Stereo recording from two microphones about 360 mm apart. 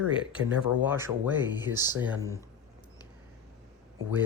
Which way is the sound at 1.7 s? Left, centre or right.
Right.